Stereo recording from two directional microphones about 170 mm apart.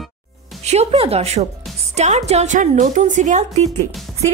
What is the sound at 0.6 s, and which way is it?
Music, 40° right (ahead or behind).